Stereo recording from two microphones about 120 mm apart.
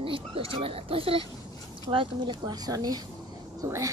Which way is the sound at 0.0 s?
50° right (ahead or behind).